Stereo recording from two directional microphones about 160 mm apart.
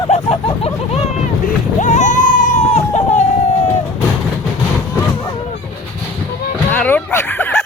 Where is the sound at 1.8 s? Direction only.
50° left (ahead or behind).